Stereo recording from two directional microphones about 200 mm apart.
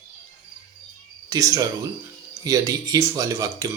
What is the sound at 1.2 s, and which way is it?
Speech, 15° right (ahead or behind).